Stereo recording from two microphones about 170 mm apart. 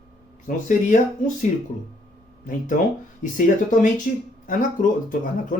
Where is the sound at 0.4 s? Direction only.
50° left (ahead or behind).